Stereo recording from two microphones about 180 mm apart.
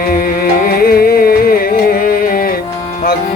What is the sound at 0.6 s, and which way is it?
Music, 55° left (ahead or behind).